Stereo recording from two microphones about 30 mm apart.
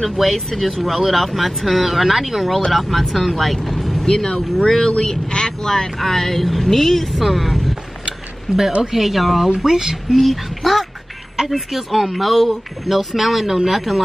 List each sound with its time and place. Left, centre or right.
0.0 s speech: centre
2.7 s speech: centre
4.0 s speech: left
5.3 s vehicle: left
5.7 s speech: centre
8.9 s speech: centre
9.6 s speech: centre
10.1 s speech: centre